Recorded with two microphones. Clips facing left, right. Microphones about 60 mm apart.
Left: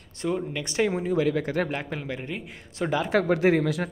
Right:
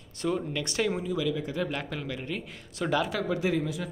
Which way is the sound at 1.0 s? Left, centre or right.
Left.